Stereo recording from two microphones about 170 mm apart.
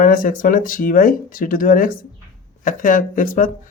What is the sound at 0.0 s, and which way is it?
Speech, 55° left (ahead or behind).